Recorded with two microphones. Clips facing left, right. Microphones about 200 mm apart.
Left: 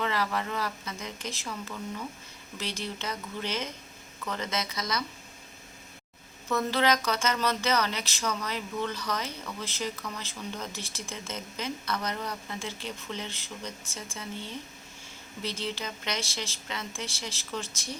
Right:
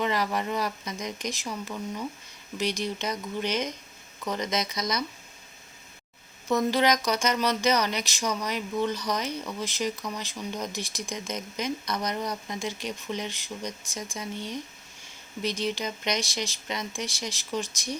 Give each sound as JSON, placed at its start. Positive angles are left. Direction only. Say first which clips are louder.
{"t": 0.0, "sound": "speech", "louder": "right 3 dB", "side_deg": -15}
{"t": 6.5, "sound": "speech", "louder": "right 3 dB", "side_deg": -15}